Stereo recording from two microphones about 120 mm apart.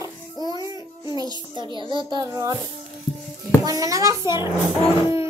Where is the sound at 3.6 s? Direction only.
30° right (ahead or behind).